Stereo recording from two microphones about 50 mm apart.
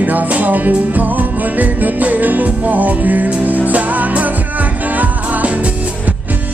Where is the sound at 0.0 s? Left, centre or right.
Right.